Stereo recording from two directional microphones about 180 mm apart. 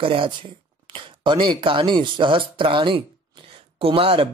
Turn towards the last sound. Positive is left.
turn(degrees=-30)  # may be behind; listen again after turning